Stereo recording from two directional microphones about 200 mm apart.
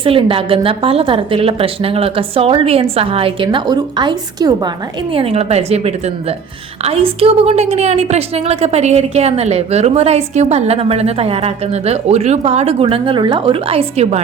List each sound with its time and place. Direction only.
0.0 s a woman's voice: 25° right (ahead or behind)
5.1 s a woman's voice: 30° right (ahead or behind)